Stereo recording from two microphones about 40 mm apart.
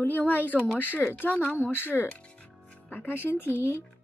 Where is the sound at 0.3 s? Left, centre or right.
Left.